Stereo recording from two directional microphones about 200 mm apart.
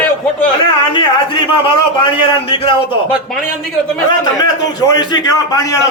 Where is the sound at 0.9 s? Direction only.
25° left (ahead or behind).